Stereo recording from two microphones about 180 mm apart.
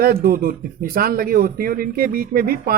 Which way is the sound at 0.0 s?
55° right (ahead or behind).